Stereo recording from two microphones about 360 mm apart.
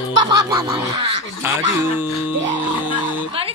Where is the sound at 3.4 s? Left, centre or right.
Centre.